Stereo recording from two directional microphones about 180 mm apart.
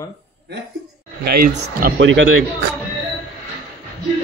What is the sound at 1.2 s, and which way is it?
Speech, 45° right (ahead or behind).